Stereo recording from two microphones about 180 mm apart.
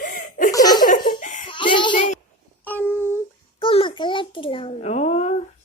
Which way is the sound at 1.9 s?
45° left (ahead or behind).